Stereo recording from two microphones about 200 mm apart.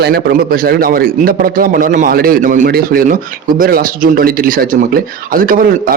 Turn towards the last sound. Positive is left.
turn(degrees=-45)  # may be behind; listen again after turning